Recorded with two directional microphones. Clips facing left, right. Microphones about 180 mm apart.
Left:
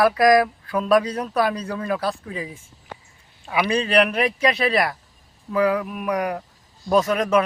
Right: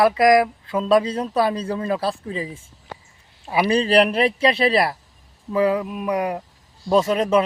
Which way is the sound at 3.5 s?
30° right (ahead or behind).